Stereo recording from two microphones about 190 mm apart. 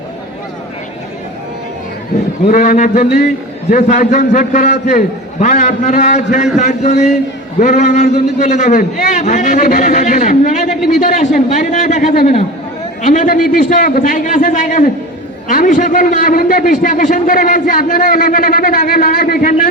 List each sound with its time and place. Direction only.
2.5 s a man's voice: 45° left (ahead or behind)